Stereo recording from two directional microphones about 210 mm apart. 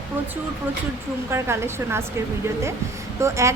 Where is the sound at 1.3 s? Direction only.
10° right (ahead or behind).